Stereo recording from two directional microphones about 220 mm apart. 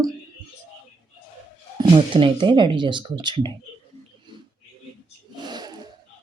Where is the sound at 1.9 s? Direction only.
20° right (ahead or behind).